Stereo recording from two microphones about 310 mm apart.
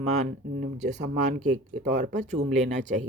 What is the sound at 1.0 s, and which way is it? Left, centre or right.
Speech, right.